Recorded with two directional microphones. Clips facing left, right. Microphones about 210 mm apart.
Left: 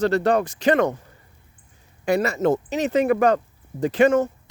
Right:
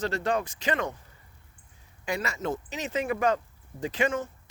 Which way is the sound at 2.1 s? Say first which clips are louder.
Left 11 dB; 60° left (ahead or behind).